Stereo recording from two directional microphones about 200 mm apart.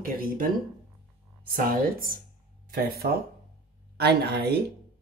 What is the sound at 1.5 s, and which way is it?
Speech, 45° right (ahead or behind).